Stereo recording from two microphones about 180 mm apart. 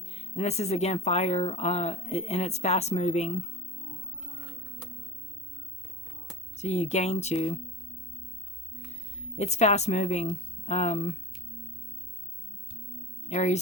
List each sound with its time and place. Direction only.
0.0 s speech: 35° left (ahead or behind)
6.6 s speech: 40° left (ahead or behind)
8.9 s speech: 35° left (ahead or behind)
13.2 s speech: 40° left (ahead or behind)